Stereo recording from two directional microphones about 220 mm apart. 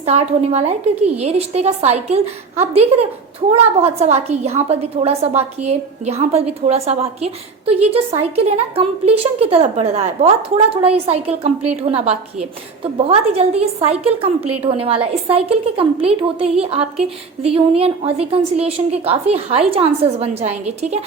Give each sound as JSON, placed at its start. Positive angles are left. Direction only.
{"t": 0.0, "sound": "a woman's voice", "side_deg": -30}